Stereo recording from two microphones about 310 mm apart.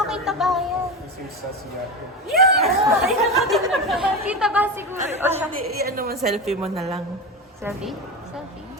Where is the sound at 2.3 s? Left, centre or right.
Right.